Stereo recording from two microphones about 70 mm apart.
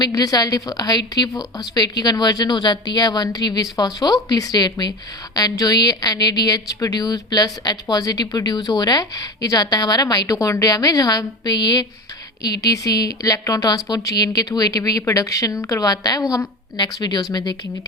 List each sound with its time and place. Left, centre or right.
0.1 s a woman's voice: left
12.4 s a woman's voice: left
15.9 s a woman's voice: left
16.7 s speech: left